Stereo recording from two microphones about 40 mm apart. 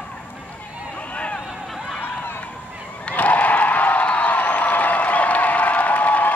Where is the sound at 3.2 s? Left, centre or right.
Left.